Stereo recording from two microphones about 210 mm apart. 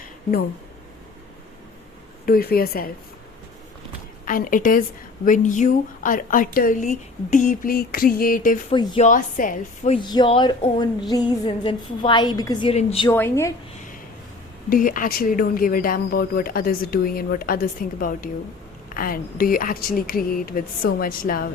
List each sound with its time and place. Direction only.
2.2 s speech: 45° left (ahead or behind)
4.3 s a woman's voice: 40° left (ahead or behind)
8.7 s a woman's voice: 20° left (ahead or behind)
9.0 s a woman's voice: 40° left (ahead or behind)
10.0 s a woman's voice: 20° left (ahead or behind)
13.1 s speech: 10° left (ahead or behind)
14.7 s speech: 40° left (ahead or behind)